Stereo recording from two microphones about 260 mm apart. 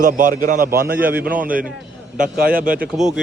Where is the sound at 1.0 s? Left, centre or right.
Centre.